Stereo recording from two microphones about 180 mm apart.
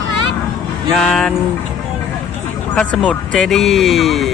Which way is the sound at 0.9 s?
5° left (ahead or behind).